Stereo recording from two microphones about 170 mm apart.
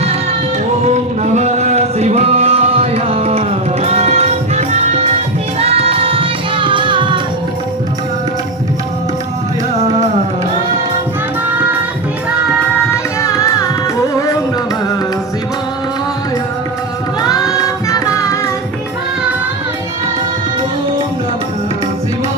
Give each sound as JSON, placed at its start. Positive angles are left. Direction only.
{"t": 0.9, "sound": "music", "side_deg": -40}
{"t": 13.2, "sound": "music", "side_deg": 20}
{"t": 17.2, "sound": "music", "side_deg": 20}